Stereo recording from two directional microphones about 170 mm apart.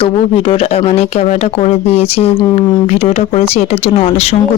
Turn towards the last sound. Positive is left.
turn(degrees=35)  # may be behind; listen again after turning